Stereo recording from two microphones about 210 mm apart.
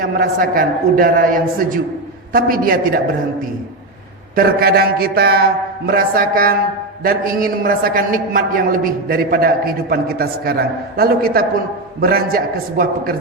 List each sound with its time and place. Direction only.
0.0 s a man's voice: 40° right (ahead or behind)
4.4 s a man's voice: 50° right (ahead or behind)